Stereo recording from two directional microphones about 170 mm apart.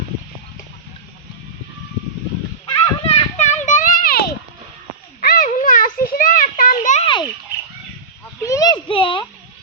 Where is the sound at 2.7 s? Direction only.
35° left (ahead or behind); by 4.2 s 55° left (ahead or behind).